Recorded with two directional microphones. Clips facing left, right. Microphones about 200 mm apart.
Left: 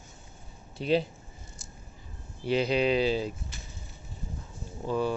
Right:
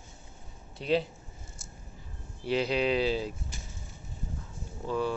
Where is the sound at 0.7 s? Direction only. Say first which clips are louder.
Left 2 dB; centre (ahead or behind).